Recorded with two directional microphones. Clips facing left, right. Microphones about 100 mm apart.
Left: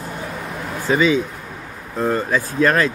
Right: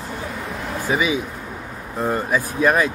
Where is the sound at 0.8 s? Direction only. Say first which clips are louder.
Left 5 dB; 10° right (ahead or behind).